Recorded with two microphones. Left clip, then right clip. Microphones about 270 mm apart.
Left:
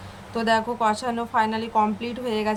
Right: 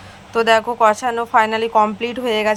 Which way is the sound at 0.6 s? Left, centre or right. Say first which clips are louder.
Right 7 dB; right.